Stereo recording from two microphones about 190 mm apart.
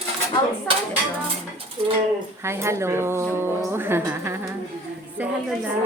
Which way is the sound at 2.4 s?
15° right (ahead or behind).